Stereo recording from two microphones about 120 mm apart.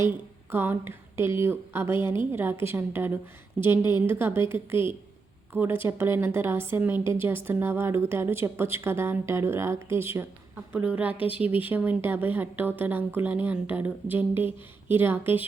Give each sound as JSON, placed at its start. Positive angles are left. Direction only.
{"t": 0.5, "sound": "a woman's voice", "side_deg": -15}